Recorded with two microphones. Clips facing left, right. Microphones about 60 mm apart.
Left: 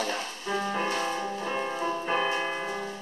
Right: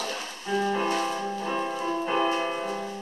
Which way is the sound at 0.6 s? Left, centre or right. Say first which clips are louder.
Right 4 dB; centre.